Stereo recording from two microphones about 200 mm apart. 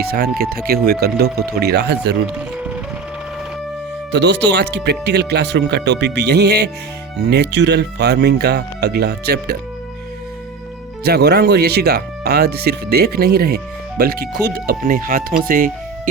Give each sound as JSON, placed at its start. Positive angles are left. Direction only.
{"t": 0.1, "sound": "speech", "side_deg": -50}
{"t": 4.1, "sound": "speech", "side_deg": -60}
{"t": 11.0, "sound": "speech", "side_deg": -55}